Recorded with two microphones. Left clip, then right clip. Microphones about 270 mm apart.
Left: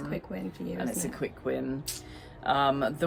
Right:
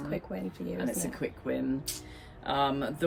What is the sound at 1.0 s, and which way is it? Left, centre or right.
Speech, centre.